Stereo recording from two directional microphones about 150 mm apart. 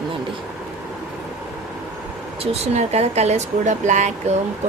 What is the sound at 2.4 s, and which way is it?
Speech, 45° right (ahead or behind).